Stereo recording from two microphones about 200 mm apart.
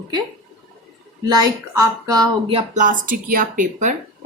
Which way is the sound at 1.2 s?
20° right (ahead or behind).